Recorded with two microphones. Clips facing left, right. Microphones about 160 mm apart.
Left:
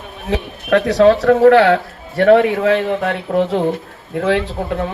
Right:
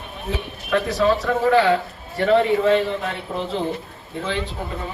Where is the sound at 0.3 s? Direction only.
75° left (ahead or behind).